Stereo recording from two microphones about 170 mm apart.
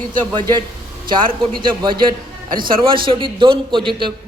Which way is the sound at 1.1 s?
30° right (ahead or behind).